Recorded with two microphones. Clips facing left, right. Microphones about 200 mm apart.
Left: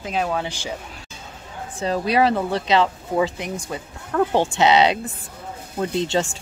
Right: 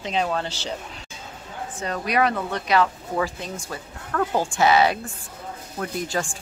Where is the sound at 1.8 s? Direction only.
30° left (ahead or behind).